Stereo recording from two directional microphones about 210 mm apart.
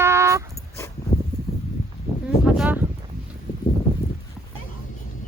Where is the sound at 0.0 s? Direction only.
15° right (ahead or behind).